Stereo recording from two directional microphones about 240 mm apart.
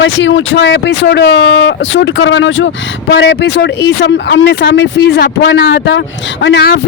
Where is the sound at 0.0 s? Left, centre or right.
Left.